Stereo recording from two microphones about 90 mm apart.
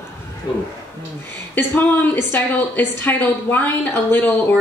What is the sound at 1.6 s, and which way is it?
A woman's voice, 25° left (ahead or behind).